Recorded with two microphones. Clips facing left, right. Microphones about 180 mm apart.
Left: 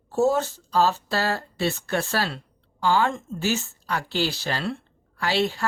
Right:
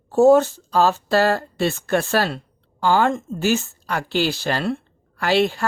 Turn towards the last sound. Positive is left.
turn(degrees=-55)  # may be behind; listen again after turning